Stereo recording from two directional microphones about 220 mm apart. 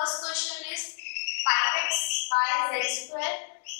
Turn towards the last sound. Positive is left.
turn(degrees=15)  # may be behind; listen again after turning